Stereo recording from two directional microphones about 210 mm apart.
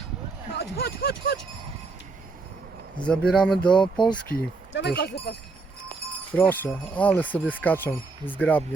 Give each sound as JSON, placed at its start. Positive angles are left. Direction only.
{"t": 0.5, "sound": "a sound", "side_deg": 50}
{"t": 3.0, "sound": "speech", "side_deg": 5}
{"t": 4.3, "sound": "speech", "side_deg": 50}
{"t": 6.3, "sound": "speech", "side_deg": 10}